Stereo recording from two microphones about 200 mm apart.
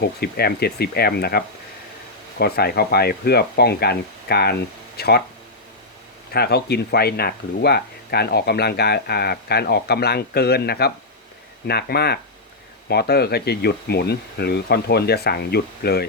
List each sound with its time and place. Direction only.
0.0 s speech: 50° left (ahead or behind)
6.3 s speech: 50° left (ahead or behind)